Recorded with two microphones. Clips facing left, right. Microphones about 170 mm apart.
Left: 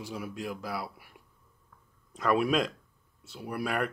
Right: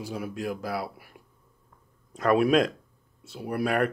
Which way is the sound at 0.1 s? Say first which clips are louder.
Right 4 dB; 55° right (ahead or behind).